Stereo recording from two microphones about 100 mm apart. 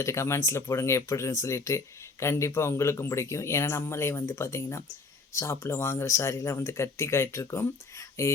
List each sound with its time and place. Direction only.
0.0 s speech: 30° left (ahead or behind)